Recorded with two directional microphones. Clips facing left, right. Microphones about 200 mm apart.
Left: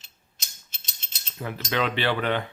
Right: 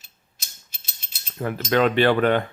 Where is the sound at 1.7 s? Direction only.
45° right (ahead or behind).